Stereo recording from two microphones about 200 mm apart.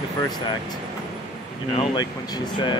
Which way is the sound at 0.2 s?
20° left (ahead or behind).